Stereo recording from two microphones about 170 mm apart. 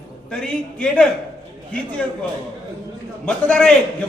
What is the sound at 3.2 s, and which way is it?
Speech, 5° left (ahead or behind).